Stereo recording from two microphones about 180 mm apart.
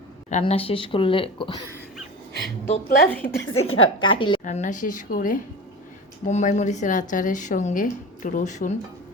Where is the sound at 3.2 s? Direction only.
70° left (ahead or behind).